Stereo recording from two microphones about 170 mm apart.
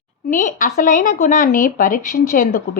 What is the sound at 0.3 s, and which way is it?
Speech, 50° left (ahead or behind).